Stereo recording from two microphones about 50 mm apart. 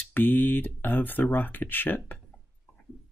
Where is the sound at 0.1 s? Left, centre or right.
Left.